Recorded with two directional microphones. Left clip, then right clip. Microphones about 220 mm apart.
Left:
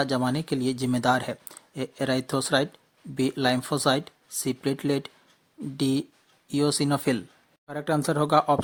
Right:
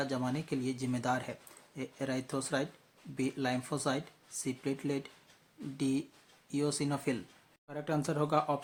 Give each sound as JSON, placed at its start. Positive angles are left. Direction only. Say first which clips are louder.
{"t": 0.0, "sound": "speech", "louder": "left 10 dB", "side_deg": 40}